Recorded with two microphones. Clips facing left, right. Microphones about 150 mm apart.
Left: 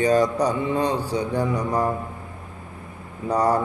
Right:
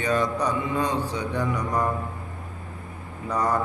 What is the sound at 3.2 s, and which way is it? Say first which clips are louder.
Speech: left 4 dB; 35° left (ahead or behind).